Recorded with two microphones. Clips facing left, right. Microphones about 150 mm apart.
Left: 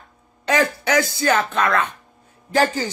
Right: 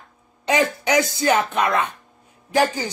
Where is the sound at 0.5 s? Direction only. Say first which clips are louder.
Even; 15° right (ahead or behind).